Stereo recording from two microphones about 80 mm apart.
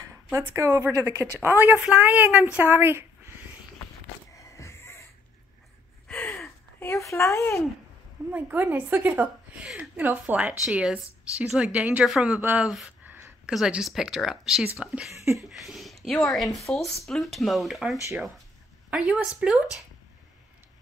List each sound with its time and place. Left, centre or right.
0.0 s a sound: right
0.5 s a woman's voice: right
4.4 s a sound: left
6.0 s gasp: centre
6.8 s speech: left
8.3 s a woman's voice: right
12.4 s a woman's voice: right
12.6 s speech: centre
15.2 s a sound: centre
16.2 s a woman's voice: centre